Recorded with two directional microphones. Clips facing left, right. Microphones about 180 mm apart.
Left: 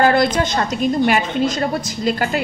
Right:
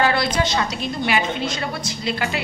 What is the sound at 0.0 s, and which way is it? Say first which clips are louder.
A woman's voice: left 5 dB; 50° left (ahead or behind).